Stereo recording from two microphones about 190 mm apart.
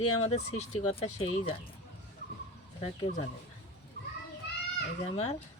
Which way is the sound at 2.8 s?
30° left (ahead or behind).